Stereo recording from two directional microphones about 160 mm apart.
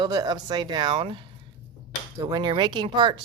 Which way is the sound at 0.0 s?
25° right (ahead or behind).